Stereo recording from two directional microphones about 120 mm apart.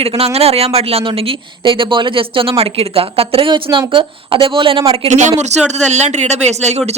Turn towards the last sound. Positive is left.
turn(degrees=-70)  # may be behind; listen again after turning